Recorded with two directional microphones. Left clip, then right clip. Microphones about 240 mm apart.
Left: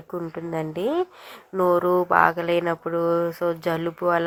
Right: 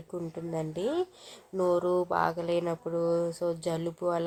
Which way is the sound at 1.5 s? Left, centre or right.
Left.